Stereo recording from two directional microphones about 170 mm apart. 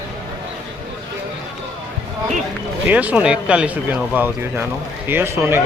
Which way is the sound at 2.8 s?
10° right (ahead or behind).